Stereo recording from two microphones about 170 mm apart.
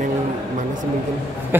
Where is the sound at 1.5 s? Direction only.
10° right (ahead or behind).